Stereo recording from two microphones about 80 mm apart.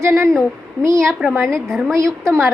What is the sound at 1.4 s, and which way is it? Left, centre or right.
Speech, centre.